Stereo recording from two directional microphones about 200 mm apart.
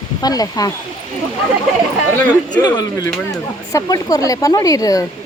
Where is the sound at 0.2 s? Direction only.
20° left (ahead or behind).